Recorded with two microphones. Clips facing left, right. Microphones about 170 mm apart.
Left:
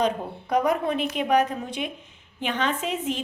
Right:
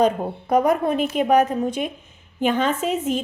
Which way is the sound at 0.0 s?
50° right (ahead or behind).